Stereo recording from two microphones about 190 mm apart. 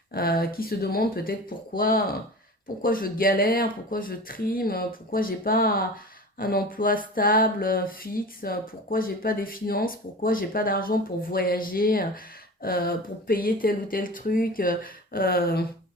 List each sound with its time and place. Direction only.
0.1 s speech: 55° left (ahead or behind)